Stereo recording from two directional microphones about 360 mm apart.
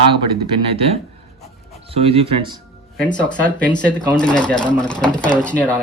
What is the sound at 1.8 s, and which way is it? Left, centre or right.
Speech, centre.